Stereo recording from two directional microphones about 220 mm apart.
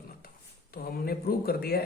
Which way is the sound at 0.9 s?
45° left (ahead or behind).